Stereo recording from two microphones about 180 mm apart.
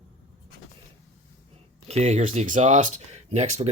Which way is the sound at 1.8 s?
35° right (ahead or behind).